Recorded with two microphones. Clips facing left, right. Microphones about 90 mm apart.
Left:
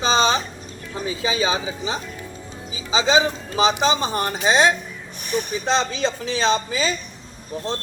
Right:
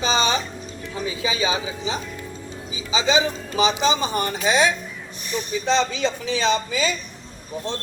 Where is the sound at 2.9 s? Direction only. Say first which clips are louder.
Left 2 dB; 35° left (ahead or behind).